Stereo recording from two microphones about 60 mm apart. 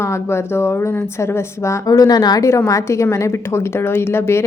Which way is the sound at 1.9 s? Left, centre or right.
Left.